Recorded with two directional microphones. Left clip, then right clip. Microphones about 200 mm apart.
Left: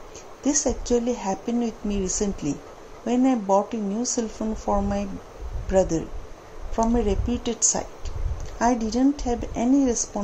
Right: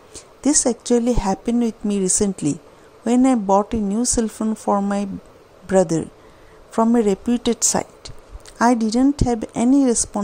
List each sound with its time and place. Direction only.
0.4 s speech: 60° right (ahead or behind)